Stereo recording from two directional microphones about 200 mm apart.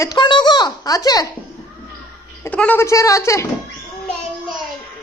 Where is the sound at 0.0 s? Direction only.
20° left (ahead or behind).